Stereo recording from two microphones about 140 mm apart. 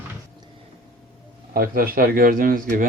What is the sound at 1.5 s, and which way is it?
A man's voice, 90° right.